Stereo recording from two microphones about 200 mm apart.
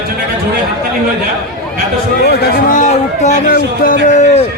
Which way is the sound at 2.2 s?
50° left (ahead or behind).